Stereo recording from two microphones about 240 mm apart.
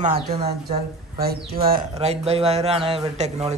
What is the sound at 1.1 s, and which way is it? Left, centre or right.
Speech, right.